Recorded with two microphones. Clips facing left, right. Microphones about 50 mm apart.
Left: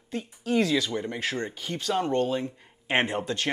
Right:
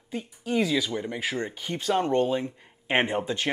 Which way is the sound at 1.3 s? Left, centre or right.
Centre.